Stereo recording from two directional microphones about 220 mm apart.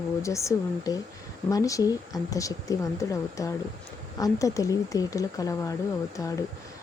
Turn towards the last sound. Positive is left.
turn(degrees=15)  # may be behind; listen again after turning